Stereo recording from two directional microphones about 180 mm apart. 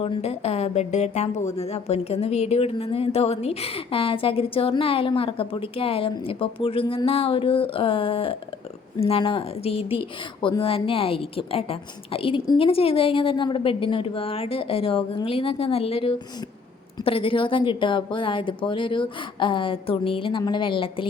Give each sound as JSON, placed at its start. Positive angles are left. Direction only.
{"t": 0.0, "sound": "a woman's voice", "side_deg": 35}